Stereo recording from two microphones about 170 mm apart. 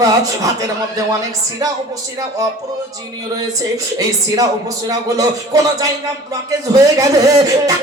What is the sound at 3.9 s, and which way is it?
A man's voice, 20° right (ahead or behind).